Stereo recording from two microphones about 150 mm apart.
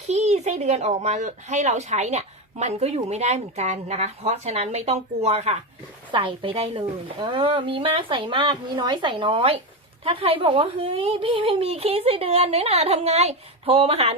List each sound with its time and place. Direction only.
0.1 s speech: 50° right (ahead or behind)
6.1 s speech: 30° right (ahead or behind)